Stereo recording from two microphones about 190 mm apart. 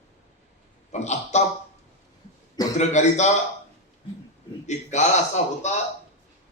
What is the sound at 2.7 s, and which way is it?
Speech, 40° left (ahead or behind).